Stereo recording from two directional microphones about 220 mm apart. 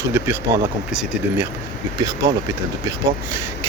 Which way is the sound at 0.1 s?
10° right (ahead or behind).